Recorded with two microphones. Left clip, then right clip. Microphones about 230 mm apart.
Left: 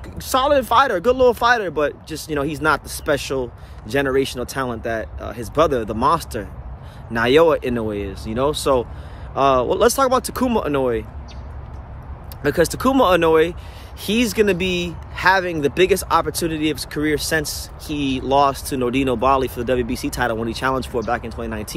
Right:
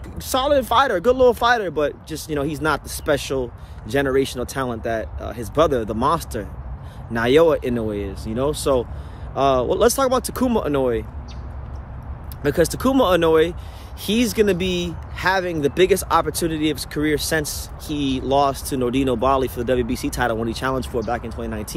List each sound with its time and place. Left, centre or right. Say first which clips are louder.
0.2 s speech: left 2 dB; centre
12.4 s speech: left 1 dB; centre